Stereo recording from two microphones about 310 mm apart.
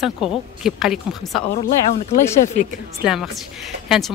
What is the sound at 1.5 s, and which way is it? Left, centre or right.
Speech, left.